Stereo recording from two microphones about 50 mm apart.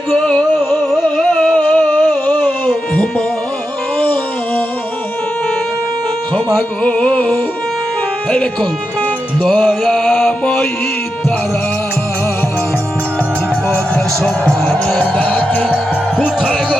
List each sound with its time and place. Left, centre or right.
0.7 s music: centre
1.3 s a sound: left
4.0 s music: left
6.8 s music: left
9.4 s music: centre
14.2 s music: centre
14.9 s music: left